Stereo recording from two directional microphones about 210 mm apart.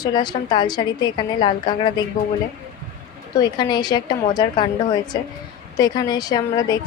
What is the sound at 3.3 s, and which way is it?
A woman's voice, 20° left (ahead or behind).